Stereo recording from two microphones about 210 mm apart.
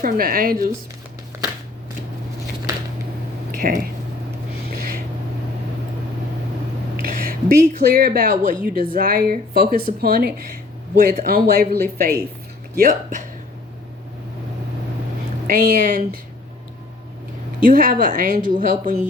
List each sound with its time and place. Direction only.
0.0 s speech: 45° right (ahead or behind)
3.5 s a sound: 40° right (ahead or behind)
6.9 s speech: 40° right (ahead or behind)
15.4 s speech: 40° right (ahead or behind)
17.6 s speech: 40° right (ahead or behind)